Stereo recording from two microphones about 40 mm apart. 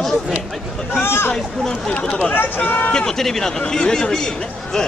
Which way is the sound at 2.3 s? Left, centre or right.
Left.